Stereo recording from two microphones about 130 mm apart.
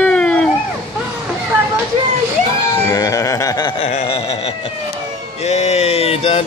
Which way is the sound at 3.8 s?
50° left (ahead or behind).